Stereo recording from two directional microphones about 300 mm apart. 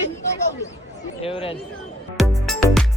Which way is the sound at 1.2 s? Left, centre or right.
Centre.